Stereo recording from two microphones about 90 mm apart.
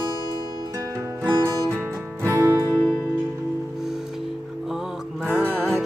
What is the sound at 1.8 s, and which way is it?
Music, 25° right (ahead or behind).